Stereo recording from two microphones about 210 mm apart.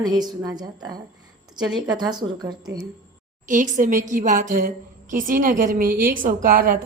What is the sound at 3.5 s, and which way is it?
A woman's voice, 35° right (ahead or behind).